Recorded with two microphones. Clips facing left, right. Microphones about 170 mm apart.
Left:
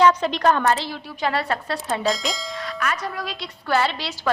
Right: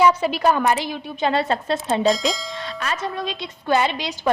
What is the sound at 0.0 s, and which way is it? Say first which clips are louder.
A woman's voice: even; 10° right (ahead or behind).